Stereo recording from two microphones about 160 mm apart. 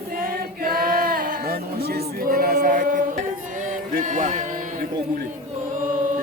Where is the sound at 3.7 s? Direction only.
50° right (ahead or behind).